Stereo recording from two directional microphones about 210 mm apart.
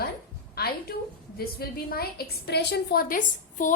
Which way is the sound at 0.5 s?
45° left (ahead or behind).